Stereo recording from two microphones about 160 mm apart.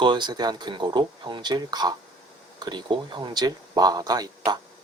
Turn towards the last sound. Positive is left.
turn(degrees=-25)  # may be behind; listen again after turning